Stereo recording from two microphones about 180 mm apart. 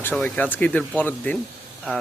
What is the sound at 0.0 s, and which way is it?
A man's voice, 10° left (ahead or behind).